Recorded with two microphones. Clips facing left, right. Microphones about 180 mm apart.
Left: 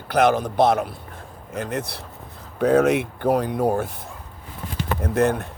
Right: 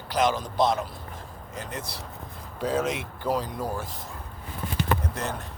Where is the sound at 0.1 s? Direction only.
60° left (ahead or behind).